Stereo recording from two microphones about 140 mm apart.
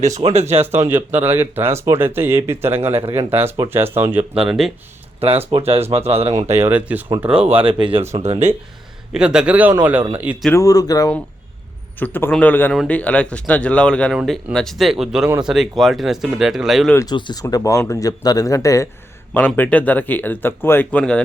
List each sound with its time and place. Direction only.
0.3 s speech: 50° right (ahead or behind)
0.9 s speech: 15° right (ahead or behind)
5.5 s speech: 45° right (ahead or behind)
6.6 s speech: 10° right (ahead or behind)
7.5 s speech: 35° right (ahead or behind)
9.1 s speech: 5° right (ahead or behind)
10.5 s speech: 25° left (ahead or behind)
11.9 s speech: 15° left (ahead or behind)
14.1 s speech: 5° right (ahead or behind)
17.1 s speech: 30° left (ahead or behind)
19.5 s speech: 10° left (ahead or behind)